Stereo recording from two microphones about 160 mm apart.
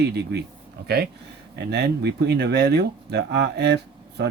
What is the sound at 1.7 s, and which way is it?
Speech, 90° right.